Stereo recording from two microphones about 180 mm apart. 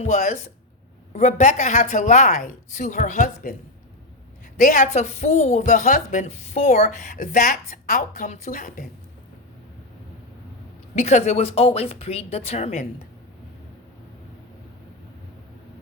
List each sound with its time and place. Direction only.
0.1 s a woman's voice: 40° left (ahead or behind)
4.5 s speech: 45° left (ahead or behind)
10.9 s a woman's voice: 40° left (ahead or behind)